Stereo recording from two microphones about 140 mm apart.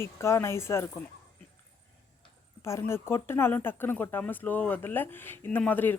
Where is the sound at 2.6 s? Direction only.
20° left (ahead or behind).